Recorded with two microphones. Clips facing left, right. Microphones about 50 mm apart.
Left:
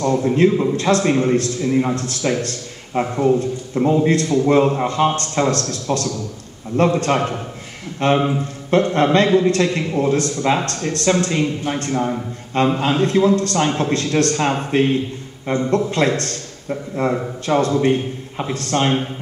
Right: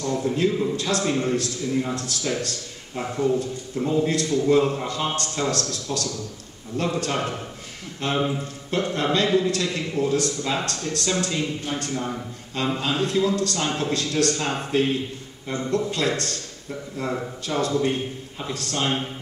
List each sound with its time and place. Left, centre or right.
0.0 s a man's voice: left